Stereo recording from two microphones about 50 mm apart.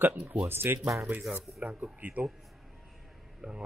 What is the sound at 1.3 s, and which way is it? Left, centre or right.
Speech, right.